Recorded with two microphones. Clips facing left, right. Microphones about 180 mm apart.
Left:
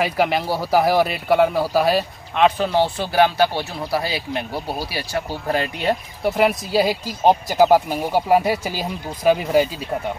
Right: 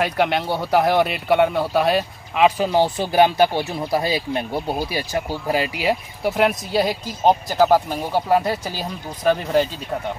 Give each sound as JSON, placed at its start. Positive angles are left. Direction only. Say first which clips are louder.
{"t": 0.0, "sound": "speech", "louder": "even", "side_deg": 0}
{"t": 2.4, "sound": "speech", "louder": "right 1 dB", "side_deg": -10}
{"t": 5.5, "sound": "speech", "louder": "even", "side_deg": -5}